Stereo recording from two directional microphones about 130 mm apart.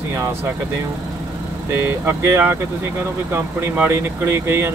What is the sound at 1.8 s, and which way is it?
Speech, 20° right (ahead or behind).